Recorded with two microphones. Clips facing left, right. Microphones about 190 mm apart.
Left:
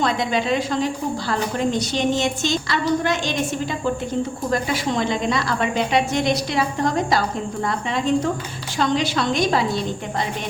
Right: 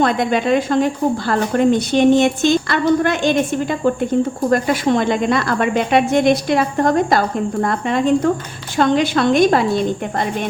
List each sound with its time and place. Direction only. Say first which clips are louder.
0.0 s a woman's voice: right 5 dB; 55° right (ahead or behind)